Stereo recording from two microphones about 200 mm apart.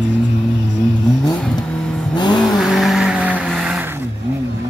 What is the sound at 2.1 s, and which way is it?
Vehicle, 20° left (ahead or behind).